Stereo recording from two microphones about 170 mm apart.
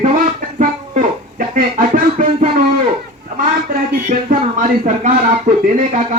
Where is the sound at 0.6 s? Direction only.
50° right (ahead or behind).